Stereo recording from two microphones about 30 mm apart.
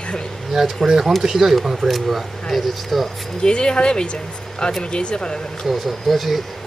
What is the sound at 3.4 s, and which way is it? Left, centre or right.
Speech, left.